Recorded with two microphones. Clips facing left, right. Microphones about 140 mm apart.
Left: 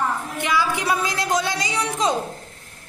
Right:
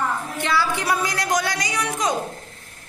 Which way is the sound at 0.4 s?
15° left (ahead or behind).